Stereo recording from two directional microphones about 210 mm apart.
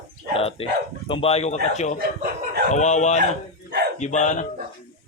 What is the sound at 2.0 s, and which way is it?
Chuckle, 50° right (ahead or behind).